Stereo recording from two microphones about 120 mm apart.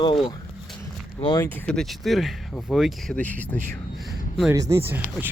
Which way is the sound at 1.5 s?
15° left (ahead or behind).